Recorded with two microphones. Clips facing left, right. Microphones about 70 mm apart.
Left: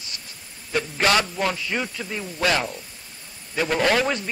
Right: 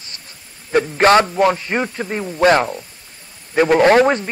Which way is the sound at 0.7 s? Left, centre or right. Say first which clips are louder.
Right 9 dB; right.